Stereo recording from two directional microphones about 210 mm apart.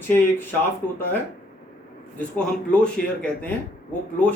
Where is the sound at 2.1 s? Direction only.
5° left (ahead or behind).